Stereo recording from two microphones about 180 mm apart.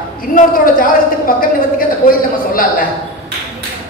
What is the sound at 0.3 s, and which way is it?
A man's voice, 50° left (ahead or behind).